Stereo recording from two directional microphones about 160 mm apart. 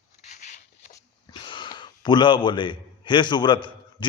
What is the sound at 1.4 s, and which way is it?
A man's voice, 30° left (ahead or behind).